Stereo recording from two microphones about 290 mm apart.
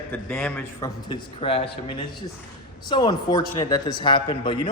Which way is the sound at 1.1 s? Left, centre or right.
Centre.